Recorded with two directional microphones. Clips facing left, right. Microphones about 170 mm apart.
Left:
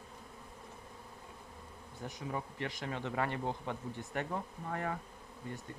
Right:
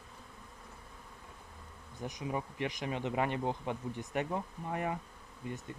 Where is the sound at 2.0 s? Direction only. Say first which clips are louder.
Right 3 dB; 15° right (ahead or behind).